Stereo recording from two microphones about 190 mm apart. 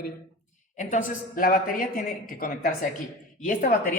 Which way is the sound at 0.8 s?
40° left (ahead or behind).